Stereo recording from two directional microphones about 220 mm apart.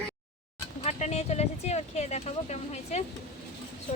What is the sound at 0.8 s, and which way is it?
A woman's voice, 30° left (ahead or behind).